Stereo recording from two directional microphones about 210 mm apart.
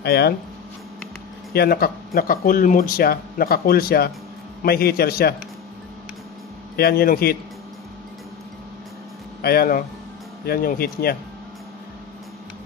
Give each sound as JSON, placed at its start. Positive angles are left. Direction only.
{"t": 0.0, "sound": "speech", "side_deg": 50}
{"t": 1.5, "sound": "speech", "side_deg": 45}
{"t": 6.8, "sound": "speech", "side_deg": 45}
{"t": 9.4, "sound": "speech", "side_deg": 45}